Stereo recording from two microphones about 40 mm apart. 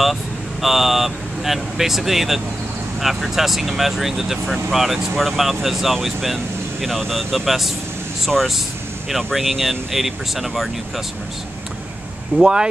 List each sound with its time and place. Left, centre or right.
0.0 s speech: centre
9.1 s speech: centre
12.4 s speech: centre